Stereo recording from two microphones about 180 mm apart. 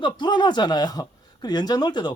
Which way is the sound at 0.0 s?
25° left (ahead or behind).